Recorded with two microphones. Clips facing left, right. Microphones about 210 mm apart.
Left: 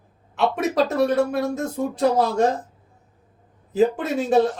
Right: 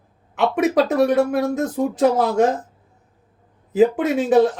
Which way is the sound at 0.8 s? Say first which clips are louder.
Right 3 dB; 20° right (ahead or behind).